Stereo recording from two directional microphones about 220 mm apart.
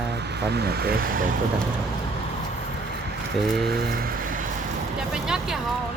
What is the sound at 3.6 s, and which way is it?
Vehicle, 45° right (ahead or behind).